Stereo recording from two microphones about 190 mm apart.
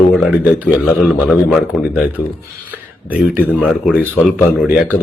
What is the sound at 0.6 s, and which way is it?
A man's voice, centre (ahead or behind).